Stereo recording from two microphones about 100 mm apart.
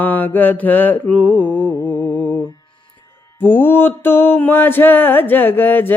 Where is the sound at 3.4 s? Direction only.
20° left (ahead or behind).